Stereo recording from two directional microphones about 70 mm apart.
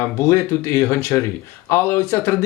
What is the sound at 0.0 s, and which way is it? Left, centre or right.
Speech, left.